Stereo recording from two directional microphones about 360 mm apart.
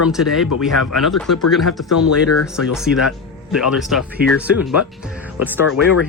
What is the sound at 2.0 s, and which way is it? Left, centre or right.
Speech, left.